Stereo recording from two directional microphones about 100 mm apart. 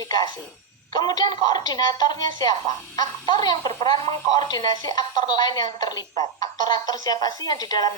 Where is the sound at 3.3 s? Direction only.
45° left (ahead or behind).